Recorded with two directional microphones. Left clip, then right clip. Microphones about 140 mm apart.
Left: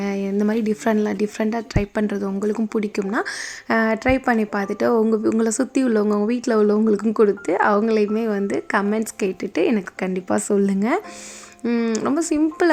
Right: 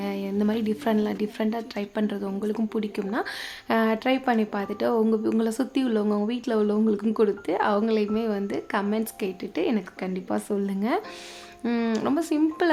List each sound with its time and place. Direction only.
0.0 s speech: 35° left (ahead or behind)
11.6 s speech: 20° left (ahead or behind)
12.0 s speech: 30° left (ahead or behind)